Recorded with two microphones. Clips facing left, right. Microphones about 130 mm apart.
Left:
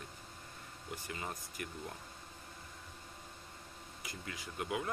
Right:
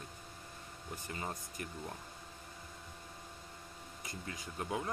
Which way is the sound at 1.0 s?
30° right (ahead or behind).